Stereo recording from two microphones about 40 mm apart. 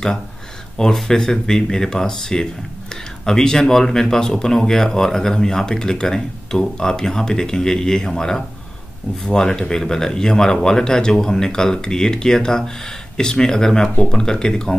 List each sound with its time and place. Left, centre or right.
1.0 s speech: centre